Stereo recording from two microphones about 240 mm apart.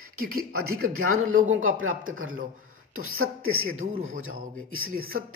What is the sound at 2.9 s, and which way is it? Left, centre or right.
Speech, right.